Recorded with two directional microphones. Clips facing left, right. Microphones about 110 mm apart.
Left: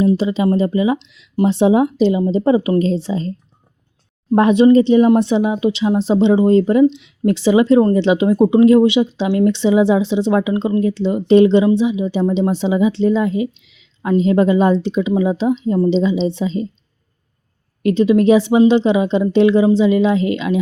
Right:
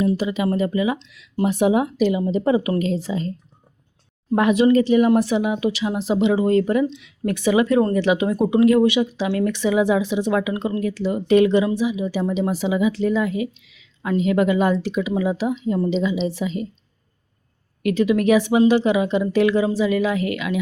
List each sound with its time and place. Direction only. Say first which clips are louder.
0.0 s speech: left 5 dB; 25° left (ahead or behind)
17.8 s speech: left 5 dB; 25° left (ahead or behind)